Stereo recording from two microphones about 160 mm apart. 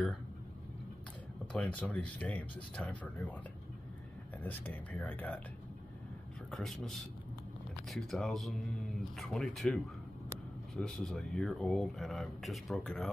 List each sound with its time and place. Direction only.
1.5 s speech: 10° left (ahead or behind)
4.4 s speech: 10° left (ahead or behind)
6.5 s speech: centre (ahead or behind)
10.8 s speech: 5° left (ahead or behind)